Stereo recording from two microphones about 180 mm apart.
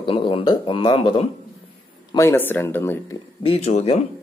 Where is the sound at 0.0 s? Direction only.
30° left (ahead or behind).